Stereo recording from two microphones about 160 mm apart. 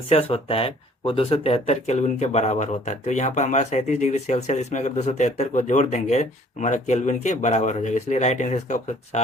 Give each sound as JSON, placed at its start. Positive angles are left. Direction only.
{"t": 0.1, "sound": "speech", "side_deg": 40}